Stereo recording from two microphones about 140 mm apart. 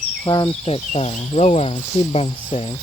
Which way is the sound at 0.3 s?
35° left (ahead or behind).